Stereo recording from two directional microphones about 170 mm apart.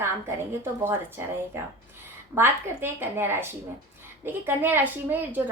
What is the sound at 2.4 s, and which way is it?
A woman's voice, 15° right (ahead or behind).